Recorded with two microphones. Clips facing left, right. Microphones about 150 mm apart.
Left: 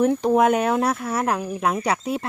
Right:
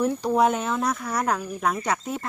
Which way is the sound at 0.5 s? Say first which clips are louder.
Left 5 dB; 70° left (ahead or behind).